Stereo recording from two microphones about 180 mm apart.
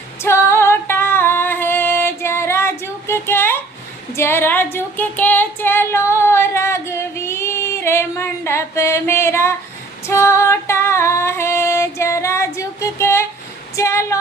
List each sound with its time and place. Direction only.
0.2 s female singing: 15° left (ahead or behind)
13.7 s music: 15° left (ahead or behind)